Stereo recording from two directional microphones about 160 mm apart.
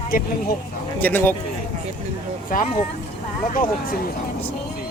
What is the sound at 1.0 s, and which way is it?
Speech, 10° left (ahead or behind).